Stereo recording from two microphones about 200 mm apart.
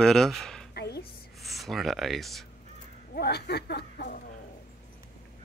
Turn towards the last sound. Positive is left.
turn(degrees=55)  # may be behind; listen again after turning